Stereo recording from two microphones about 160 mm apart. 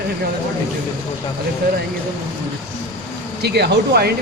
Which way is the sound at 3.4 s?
90° right.